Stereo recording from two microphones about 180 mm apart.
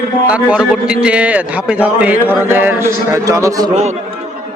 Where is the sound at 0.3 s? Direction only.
5° right (ahead or behind).